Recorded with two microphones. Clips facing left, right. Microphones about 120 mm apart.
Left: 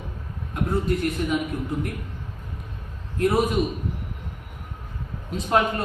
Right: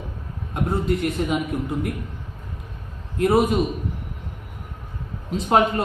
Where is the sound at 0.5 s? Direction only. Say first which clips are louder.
Right 1 dB; 25° right (ahead or behind).